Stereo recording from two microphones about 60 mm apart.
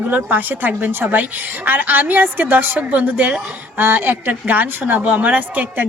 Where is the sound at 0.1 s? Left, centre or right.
Right.